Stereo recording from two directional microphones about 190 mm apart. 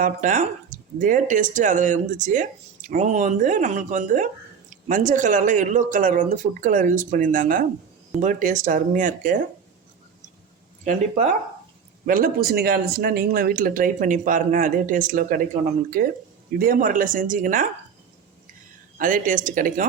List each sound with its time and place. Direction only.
0.0 s speech: 40° right (ahead or behind)
10.8 s speech: 40° right (ahead or behind)
18.9 s speech: 45° right (ahead or behind)